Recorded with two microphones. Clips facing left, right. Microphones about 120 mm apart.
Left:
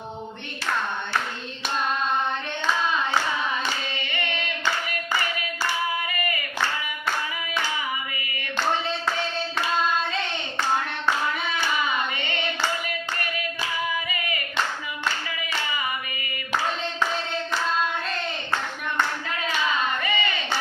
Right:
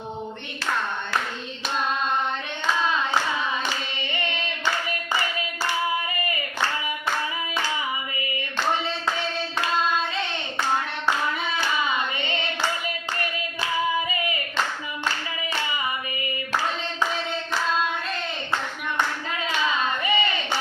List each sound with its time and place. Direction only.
20.0 s crowd: 20° right (ahead or behind)